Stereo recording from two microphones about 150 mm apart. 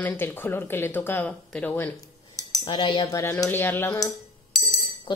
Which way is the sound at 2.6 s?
35° left (ahead or behind).